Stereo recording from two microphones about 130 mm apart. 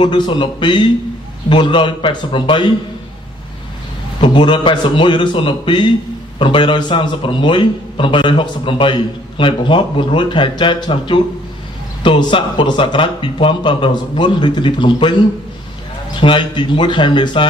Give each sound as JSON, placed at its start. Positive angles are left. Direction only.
{"t": 0.0, "sound": "a man's voice", "side_deg": 35}
{"t": 4.2, "sound": "a man's voice", "side_deg": 40}
{"t": 16.2, "sound": "a man's voice", "side_deg": 40}